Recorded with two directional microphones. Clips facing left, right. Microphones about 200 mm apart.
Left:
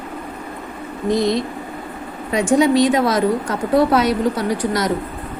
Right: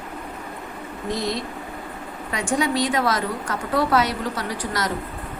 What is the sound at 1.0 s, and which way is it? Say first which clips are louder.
Speech: left 9 dB; 20° left (ahead or behind).